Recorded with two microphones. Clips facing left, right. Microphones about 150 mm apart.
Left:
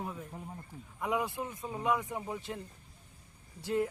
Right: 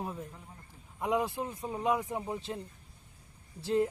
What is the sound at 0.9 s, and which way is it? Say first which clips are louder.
Speech: right 3 dB; 25° right (ahead or behind).